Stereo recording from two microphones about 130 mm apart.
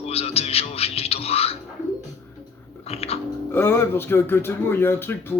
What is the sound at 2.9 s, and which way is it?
Music, 50° left (ahead or behind).